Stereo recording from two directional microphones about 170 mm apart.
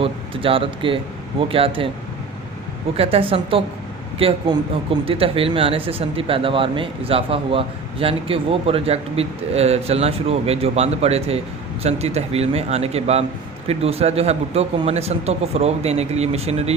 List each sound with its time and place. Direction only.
0.0 s speech: 30° right (ahead or behind)
3.0 s speech: 35° right (ahead or behind)